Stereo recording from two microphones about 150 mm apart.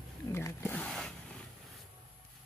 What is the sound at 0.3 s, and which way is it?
Wild animals, 15° left (ahead or behind).